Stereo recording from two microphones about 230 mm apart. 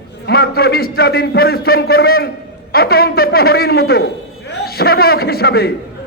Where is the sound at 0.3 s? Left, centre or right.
Left.